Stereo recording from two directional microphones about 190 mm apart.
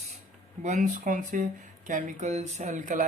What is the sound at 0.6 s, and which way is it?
Speech, 40° right (ahead or behind).